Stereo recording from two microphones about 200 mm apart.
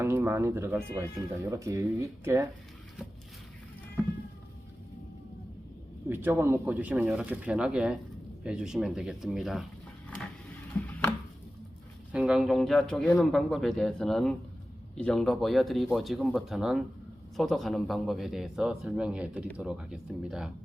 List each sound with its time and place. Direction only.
0.0 s speech: 10° right (ahead or behind)
6.1 s speech: 10° right (ahead or behind)
12.1 s speech: 5° right (ahead or behind)